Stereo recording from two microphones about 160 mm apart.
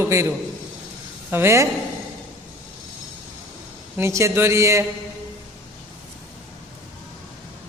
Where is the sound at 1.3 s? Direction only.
15° right (ahead or behind).